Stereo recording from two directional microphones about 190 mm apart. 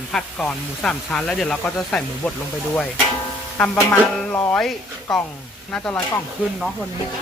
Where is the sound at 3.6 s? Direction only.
10° left (ahead or behind).